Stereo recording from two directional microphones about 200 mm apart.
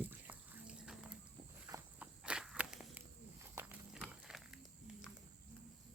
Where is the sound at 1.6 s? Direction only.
15° right (ahead or behind).